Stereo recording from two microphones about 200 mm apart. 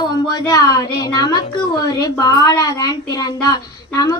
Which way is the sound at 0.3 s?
20° left (ahead or behind).